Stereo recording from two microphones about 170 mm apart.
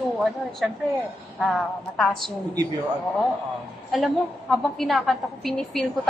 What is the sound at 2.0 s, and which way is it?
Speech, centre (ahead or behind).